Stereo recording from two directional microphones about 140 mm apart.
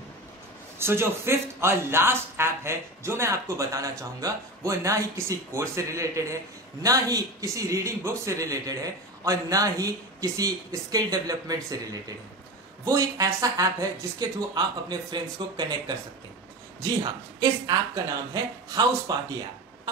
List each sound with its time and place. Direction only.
0.7 s speech: 15° right (ahead or behind)